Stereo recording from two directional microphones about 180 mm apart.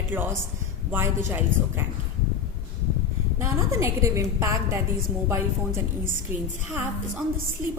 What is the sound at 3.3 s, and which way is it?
A woman's voice, 15° right (ahead or behind).